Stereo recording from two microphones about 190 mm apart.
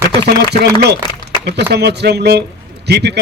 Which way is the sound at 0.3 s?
60° right (ahead or behind).